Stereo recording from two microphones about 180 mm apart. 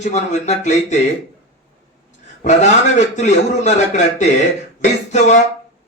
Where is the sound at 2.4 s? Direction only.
40° left (ahead or behind).